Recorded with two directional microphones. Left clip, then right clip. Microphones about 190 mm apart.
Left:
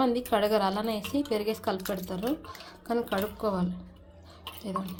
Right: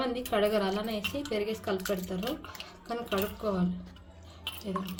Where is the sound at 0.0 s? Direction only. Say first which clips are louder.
Left 3 dB; 45° left (ahead or behind).